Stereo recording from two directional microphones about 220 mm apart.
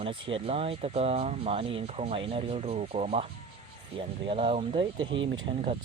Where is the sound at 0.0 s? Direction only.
25° right (ahead or behind).